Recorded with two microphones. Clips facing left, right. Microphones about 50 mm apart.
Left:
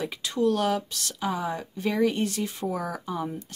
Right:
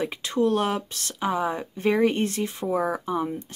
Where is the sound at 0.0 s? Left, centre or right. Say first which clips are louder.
Right 2 dB; right.